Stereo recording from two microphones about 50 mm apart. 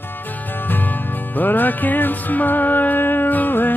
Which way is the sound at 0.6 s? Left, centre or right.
Left.